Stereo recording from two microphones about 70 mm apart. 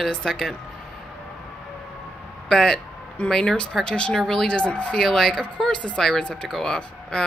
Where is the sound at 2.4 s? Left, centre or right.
Centre.